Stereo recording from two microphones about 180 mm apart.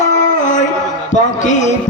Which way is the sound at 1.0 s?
45° left (ahead or behind).